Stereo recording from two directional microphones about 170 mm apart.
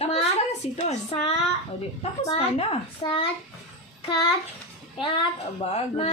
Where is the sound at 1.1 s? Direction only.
30° left (ahead or behind).